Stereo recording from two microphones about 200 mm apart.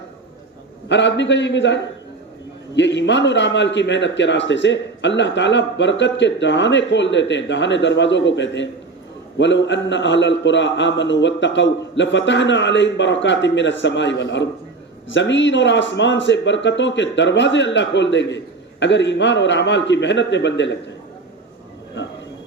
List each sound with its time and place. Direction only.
0.9 s a man's voice: 65° left (ahead or behind)